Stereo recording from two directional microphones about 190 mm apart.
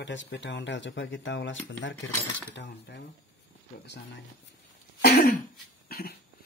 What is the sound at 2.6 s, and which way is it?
Speech, 70° left (ahead or behind).